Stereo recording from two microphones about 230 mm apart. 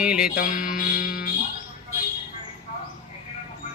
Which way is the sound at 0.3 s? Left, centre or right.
Left.